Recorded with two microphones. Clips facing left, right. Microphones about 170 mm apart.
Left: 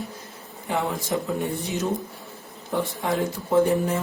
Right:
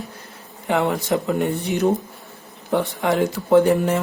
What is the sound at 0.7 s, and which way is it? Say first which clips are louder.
Speech: right 6 dB; 75° right (ahead or behind).